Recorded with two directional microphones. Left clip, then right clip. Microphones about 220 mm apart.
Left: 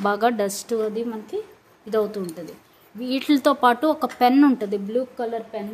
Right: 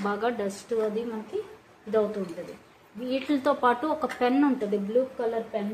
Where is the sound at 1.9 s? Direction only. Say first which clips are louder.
Left 3 dB; 55° left (ahead or behind).